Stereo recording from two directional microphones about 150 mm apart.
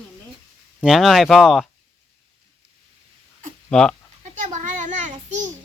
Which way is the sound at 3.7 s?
5° left (ahead or behind).